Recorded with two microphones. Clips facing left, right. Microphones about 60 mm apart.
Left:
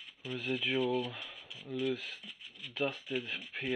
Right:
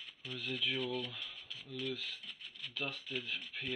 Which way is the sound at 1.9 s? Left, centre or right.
Left.